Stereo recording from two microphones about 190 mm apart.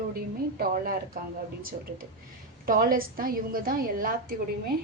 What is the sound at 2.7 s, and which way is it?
A woman's voice, 50° right (ahead or behind).